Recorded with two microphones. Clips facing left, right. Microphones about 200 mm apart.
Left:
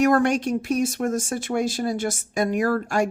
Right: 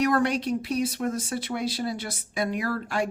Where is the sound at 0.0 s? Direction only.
50° left (ahead or behind).